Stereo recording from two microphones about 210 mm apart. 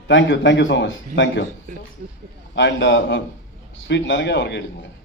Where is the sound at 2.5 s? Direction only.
60° left (ahead or behind).